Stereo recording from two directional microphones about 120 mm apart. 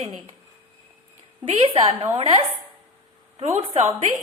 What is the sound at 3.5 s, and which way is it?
Speech, 60° right (ahead or behind).